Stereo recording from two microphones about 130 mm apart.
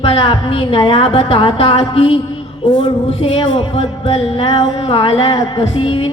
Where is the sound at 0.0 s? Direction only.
45° left (ahead or behind).